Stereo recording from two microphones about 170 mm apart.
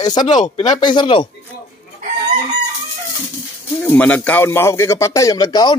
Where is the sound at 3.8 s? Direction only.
10° left (ahead or behind).